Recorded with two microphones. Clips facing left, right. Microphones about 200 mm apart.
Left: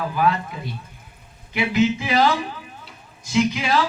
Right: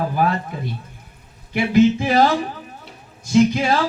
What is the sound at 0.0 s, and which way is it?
Speech, 45° right (ahead or behind).